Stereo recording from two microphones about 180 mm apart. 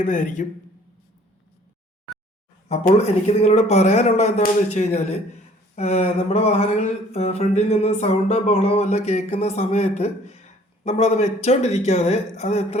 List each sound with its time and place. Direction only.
0.0 s speech: 45° left (ahead or behind)
2.6 s speech: 35° left (ahead or behind)